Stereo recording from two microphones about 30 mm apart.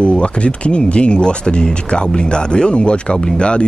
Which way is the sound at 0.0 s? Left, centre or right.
Left.